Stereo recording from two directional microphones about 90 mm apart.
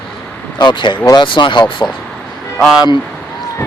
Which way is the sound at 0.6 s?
60° left (ahead or behind).